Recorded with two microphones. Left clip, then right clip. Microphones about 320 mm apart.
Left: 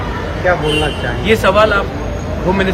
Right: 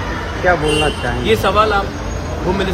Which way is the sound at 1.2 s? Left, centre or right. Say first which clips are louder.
Left 3 dB; centre.